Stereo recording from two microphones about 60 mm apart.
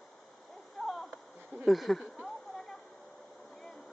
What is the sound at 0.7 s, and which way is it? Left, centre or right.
Splash, centre.